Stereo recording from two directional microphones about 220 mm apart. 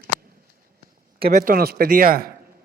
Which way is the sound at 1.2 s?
35° right (ahead or behind).